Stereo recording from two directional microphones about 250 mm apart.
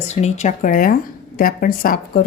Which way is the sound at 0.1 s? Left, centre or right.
Left.